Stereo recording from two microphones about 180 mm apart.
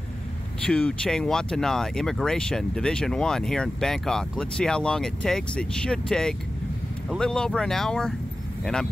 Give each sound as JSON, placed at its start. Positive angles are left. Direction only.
{"t": 0.7, "sound": "speech", "side_deg": 5}